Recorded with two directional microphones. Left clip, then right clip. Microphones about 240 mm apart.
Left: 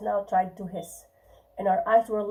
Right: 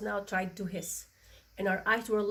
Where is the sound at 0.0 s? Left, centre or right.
Right.